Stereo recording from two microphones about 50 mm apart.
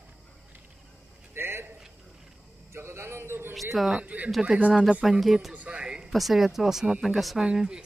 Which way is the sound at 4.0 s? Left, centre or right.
Right.